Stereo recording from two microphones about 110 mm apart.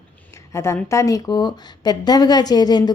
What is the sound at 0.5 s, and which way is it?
A woman's voice, 25° left (ahead or behind).